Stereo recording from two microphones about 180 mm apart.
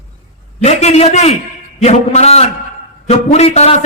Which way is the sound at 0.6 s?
35° left (ahead or behind).